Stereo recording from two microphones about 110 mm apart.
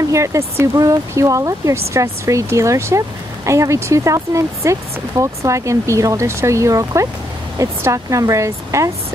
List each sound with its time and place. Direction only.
0.0 s speech: 30° right (ahead or behind)